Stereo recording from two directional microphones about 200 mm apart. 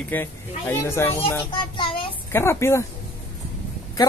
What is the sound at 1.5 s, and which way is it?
Speech, 25° left (ahead or behind).